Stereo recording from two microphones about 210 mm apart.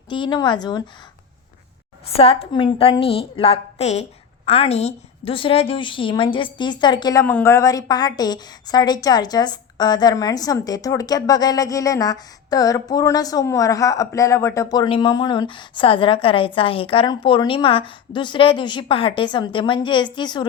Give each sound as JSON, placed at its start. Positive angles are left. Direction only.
{"t": 0.1, "sound": "a woman's voice", "side_deg": 20}
{"t": 2.0, "sound": "a woman's voice", "side_deg": 30}